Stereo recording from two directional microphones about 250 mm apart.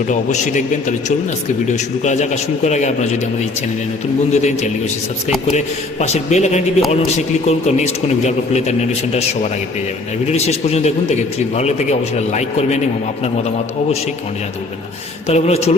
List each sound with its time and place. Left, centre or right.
0.1 s a man's voice: left
4.3 s a man's voice: left
10.2 s a man's voice: left
15.3 s a man's voice: left